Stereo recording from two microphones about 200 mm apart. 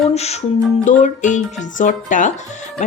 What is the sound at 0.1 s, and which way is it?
Speech, 30° left (ahead or behind).